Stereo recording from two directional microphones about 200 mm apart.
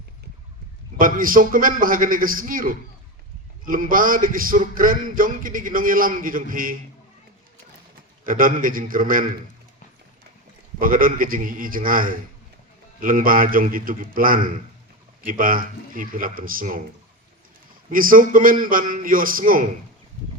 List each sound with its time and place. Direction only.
0.9 s a man's voice: 45° right (ahead or behind)
8.2 s a man's voice: 45° right (ahead or behind)
10.8 s a man's voice: 45° right (ahead or behind)
17.8 s a man's voice: 45° right (ahead or behind)